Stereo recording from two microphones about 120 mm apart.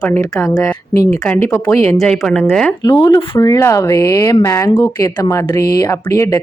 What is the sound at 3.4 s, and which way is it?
Speech, 25° left (ahead or behind).